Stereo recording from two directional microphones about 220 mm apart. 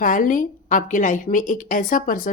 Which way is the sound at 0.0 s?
40° left (ahead or behind).